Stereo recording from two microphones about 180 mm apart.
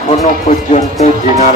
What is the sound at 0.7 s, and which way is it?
Music, 40° left (ahead or behind).